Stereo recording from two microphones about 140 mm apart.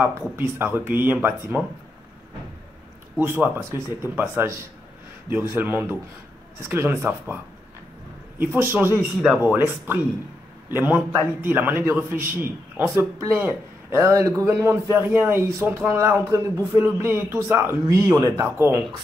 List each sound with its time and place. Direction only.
0.4 s a man's voice: 15° right (ahead or behind)
3.2 s a man's voice: 15° right (ahead or behind)
8.4 s a man's voice: 15° right (ahead or behind)